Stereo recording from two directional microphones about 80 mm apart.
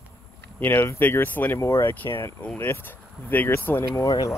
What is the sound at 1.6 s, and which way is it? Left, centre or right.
Speech, left.